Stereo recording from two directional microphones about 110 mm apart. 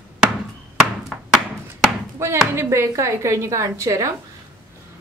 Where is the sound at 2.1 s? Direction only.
25° right (ahead or behind).